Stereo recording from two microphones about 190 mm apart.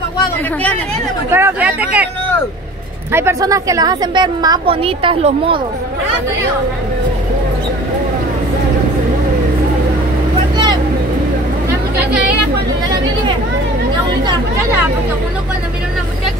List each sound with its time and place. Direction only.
1.3 s speech: 10° right (ahead or behind)
3.1 s a woman's voice: 15° right (ahead or behind); by 5.6 s 30° right (ahead or behind)
14.2 s chatter: 10° right (ahead or behind)